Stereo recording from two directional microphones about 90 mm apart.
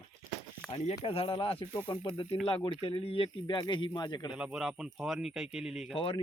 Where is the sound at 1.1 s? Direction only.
90° left; by 2.3 s 65° left (ahead or behind).